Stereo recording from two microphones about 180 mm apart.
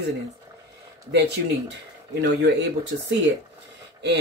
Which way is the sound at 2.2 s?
75° right (ahead or behind).